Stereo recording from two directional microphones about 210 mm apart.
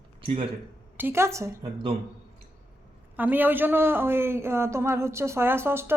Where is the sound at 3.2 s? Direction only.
10° right (ahead or behind).